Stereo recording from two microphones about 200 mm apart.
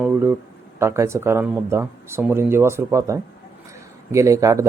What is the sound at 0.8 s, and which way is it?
Speech, 15° right (ahead or behind).